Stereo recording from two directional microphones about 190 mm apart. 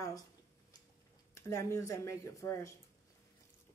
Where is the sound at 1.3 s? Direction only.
15° left (ahead or behind).